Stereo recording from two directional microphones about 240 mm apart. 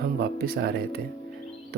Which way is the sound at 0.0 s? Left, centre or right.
Right.